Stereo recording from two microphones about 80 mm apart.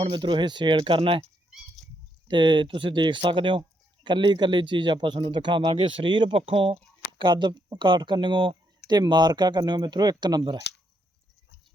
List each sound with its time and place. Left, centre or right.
0.1 s speech: right
2.2 s speech: right
4.0 s speech: right
7.2 s speech: right
7.8 s speech: right
9.0 s speech: right